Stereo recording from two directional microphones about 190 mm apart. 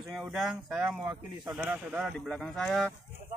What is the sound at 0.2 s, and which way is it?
Speech, centre (ahead or behind).